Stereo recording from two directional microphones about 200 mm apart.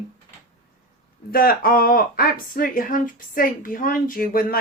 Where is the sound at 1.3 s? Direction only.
45° left (ahead or behind).